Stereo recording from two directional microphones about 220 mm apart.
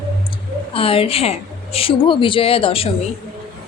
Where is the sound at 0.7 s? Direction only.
25° left (ahead or behind).